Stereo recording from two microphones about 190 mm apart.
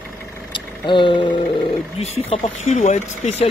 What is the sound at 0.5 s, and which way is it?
Vehicle, 25° left (ahead or behind).